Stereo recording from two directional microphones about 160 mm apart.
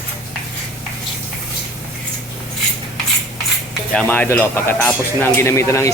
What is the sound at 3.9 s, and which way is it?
Speech, 10° left (ahead or behind).